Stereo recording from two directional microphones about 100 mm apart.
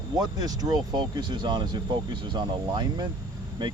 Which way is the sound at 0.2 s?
40° right (ahead or behind).